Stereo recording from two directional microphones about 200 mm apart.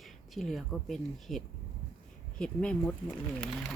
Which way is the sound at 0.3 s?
Centre (ahead or behind).